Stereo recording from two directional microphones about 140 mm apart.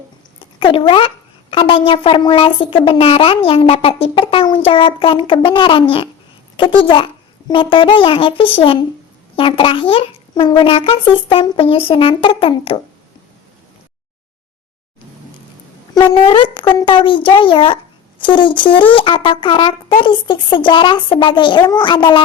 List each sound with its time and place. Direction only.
0.3 s speech: 40° left (ahead or behind)
16.0 s speech: 35° left (ahead or behind)